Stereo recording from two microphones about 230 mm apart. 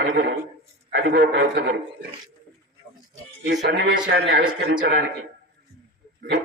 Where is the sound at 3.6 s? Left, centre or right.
Right.